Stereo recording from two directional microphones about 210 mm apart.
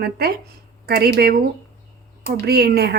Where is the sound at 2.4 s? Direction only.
50° right (ahead or behind).